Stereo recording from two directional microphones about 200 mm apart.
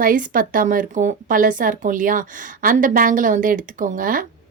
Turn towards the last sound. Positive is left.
turn(degrees=-45)  # may be behind; listen again after turning